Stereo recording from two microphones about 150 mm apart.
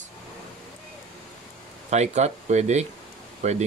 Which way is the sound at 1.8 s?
50° right (ahead or behind).